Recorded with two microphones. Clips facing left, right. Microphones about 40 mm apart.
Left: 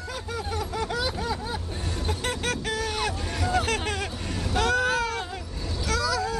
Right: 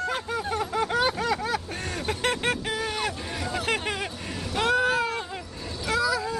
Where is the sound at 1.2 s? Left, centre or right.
Right.